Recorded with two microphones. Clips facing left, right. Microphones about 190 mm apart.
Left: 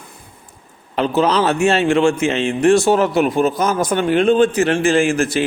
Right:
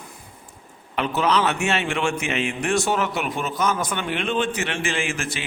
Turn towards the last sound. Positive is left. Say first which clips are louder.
# left 12 dB
turn(degrees=40)  # may be behind; listen again after turning